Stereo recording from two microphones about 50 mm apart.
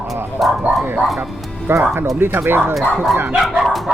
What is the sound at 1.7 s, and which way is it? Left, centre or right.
Speech, right.